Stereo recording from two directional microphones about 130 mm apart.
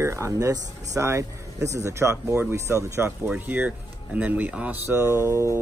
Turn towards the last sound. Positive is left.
turn(degrees=-20)  # may be behind; listen again after turning